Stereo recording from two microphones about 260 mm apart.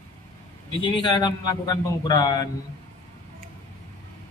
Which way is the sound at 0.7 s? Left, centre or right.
Centre.